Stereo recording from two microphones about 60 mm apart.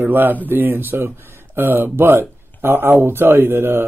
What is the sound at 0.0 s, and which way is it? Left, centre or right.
Speech, right.